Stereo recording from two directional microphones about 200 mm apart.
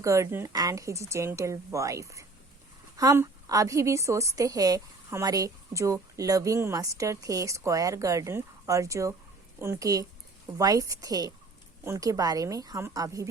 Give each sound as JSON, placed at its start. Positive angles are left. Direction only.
{"t": 0.0, "sound": "a woman's voice", "side_deg": -15}